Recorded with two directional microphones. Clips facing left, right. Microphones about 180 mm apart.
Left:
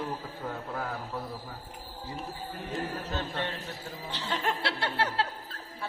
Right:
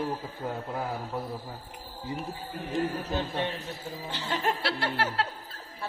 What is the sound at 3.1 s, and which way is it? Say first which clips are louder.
Speech: right 3 dB; 15° right (ahead or behind).